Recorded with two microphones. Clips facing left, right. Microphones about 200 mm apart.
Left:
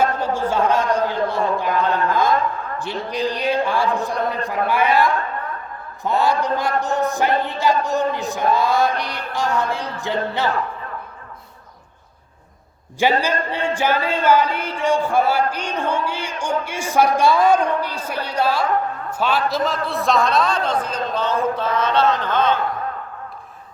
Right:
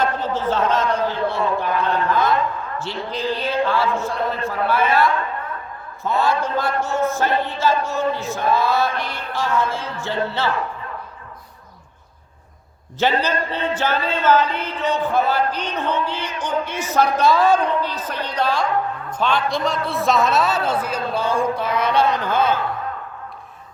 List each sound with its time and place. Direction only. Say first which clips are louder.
0.0 s a sound: left 1 dB; 10° left (ahead or behind)
2.7 s speech: left 2 dB; 15° left (ahead or behind)
6.1 s speech: left 1 dB; 15° left (ahead or behind)
13.0 s a man's voice: left 1 dB; 10° left (ahead or behind); by 22.5 s 10° right (ahead or behind)